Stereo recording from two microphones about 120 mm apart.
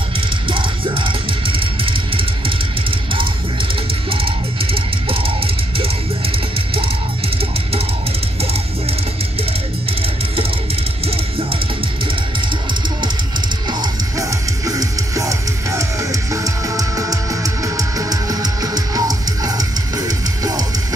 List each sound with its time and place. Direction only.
0.5 s music: 45° right (ahead or behind)
4.1 s music: 50° right (ahead or behind)
10.3 s music: 55° right (ahead or behind)
13.7 s music: 30° right (ahead or behind)